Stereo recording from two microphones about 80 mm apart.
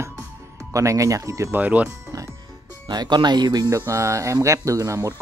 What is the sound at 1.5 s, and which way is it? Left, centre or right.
Speech, centre.